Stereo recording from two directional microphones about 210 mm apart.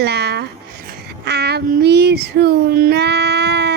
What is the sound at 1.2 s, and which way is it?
Child singing, 50° right (ahead or behind).